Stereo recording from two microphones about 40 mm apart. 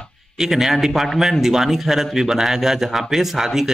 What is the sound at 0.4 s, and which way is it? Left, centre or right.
A man's voice, centre.